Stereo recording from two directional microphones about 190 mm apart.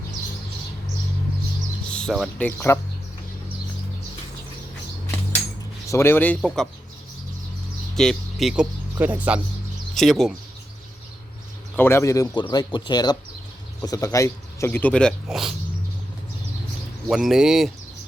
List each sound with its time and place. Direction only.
1.9 s music: 5° left (ahead or behind)
2.4 s speech: 10° left (ahead or behind)
5.9 s speech: 15° left (ahead or behind)
7.9 s speech: centre (ahead or behind)
11.8 s speech: 15° left (ahead or behind); by 15.5 s centre (ahead or behind)
17.1 s speech: centre (ahead or behind)